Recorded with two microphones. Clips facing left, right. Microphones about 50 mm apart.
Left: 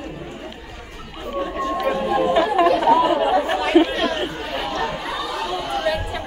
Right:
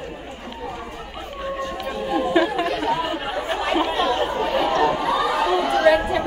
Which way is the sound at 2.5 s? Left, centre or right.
Left.